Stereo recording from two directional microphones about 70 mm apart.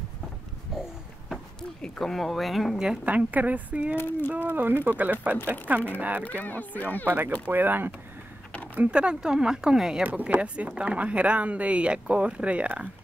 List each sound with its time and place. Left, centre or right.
0.7 s a sound: centre
1.3 s speech: centre
3.1 s a woman's voice: right
3.9 s speech: left
4.4 s a woman's voice: right
6.4 s speech: left
7.1 s a woman's voice: right; by 10.0 s centre
10.0 s a woman's voice: centre